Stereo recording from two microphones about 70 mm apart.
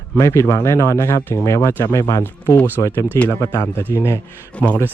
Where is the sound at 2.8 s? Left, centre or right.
Left.